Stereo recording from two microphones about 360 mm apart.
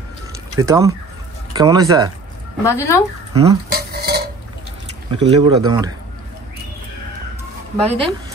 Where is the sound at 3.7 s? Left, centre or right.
Right.